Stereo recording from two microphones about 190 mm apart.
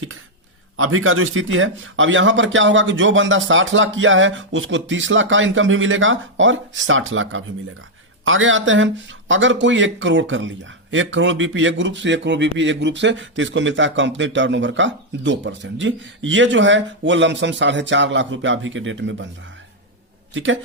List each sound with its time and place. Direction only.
0.8 s a man's voice: 90° right
20.3 s a man's voice: 80° right